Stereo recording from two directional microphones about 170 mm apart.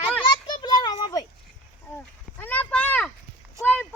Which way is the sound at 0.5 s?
25° left (ahead or behind).